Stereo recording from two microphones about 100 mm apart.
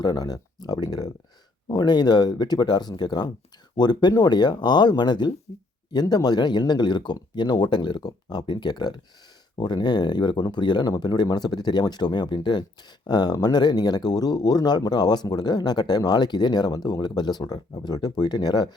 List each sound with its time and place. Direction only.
0.0 s speech: 40° left (ahead or behind)
5.9 s speech: 45° left (ahead or behind)